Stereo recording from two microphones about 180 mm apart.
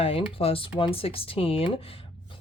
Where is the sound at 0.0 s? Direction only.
30° left (ahead or behind).